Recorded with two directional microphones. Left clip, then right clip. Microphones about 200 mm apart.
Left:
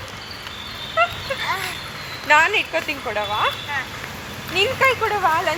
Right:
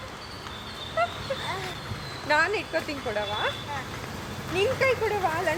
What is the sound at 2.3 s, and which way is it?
Speech, centre (ahead or behind).